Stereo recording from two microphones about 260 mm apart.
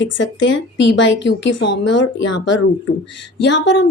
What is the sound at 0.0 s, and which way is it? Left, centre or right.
A woman's voice, left.